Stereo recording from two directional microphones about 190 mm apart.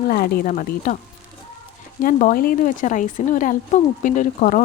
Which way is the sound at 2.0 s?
45° left (ahead or behind).